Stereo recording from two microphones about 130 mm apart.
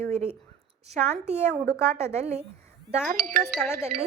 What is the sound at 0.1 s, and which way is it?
A woman's voice, 55° right (ahead or behind).